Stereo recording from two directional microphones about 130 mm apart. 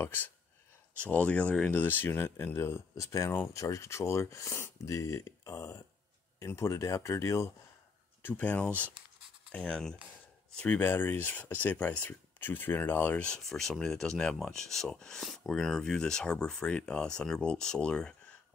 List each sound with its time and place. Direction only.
0.0 s speech: 15° left (ahead or behind)